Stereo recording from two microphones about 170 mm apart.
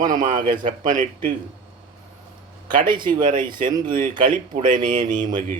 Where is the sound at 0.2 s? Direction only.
50° right (ahead or behind).